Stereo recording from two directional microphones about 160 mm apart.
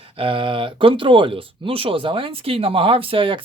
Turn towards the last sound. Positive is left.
turn(degrees=-35)  # may be behind; listen again after turning